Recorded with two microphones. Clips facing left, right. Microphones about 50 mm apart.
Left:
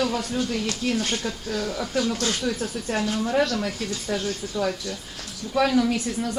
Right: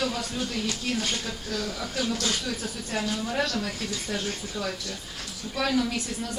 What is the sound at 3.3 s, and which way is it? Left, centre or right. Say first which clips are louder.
Speech: left 5 dB; centre.